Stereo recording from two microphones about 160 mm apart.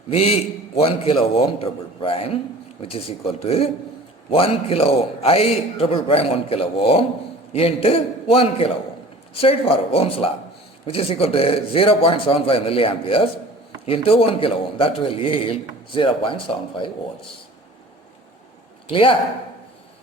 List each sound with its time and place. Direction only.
0.1 s a man's voice: 40° left (ahead or behind)
18.9 s a man's voice: 35° left (ahead or behind)